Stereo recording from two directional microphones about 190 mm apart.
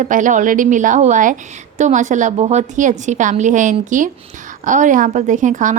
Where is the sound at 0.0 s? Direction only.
40° right (ahead or behind).